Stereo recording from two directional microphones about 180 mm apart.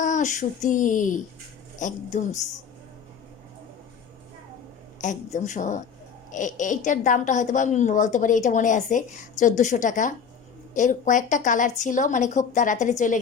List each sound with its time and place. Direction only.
0.0 s a woman's voice: 45° left (ahead or behind)
4.9 s a woman's voice: 40° left (ahead or behind)